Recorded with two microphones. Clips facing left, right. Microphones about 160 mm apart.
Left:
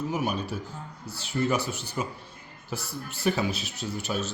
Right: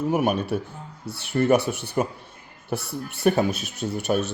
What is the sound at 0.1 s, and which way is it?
A man's voice, 60° right (ahead or behind).